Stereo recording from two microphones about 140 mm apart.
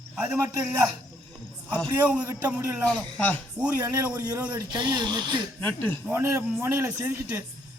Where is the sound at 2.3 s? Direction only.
15° right (ahead or behind).